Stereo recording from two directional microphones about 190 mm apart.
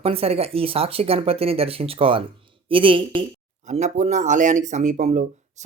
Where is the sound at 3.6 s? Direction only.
40° right (ahead or behind).